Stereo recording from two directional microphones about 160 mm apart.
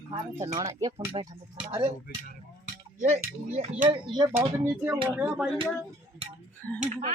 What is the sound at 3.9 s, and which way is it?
Speech, 25° right (ahead or behind).